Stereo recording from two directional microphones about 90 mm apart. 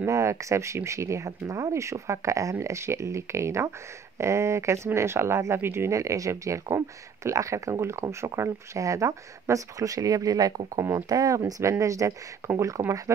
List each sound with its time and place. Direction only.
0.0 s speech: 30° right (ahead or behind)
10.8 s speech: 30° right (ahead or behind)
11.1 s speech: 40° right (ahead or behind)